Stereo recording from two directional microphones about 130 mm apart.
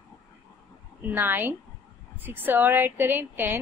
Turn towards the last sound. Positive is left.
turn(degrees=-15)  # may be behind; listen again after turning